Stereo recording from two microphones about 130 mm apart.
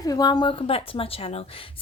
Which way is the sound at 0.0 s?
30° left (ahead or behind).